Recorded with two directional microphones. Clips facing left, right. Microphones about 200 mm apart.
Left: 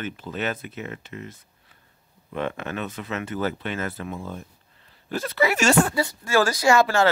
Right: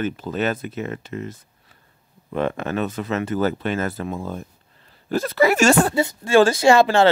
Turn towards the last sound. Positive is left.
turn(degrees=-30)  # may be behind; listen again after turning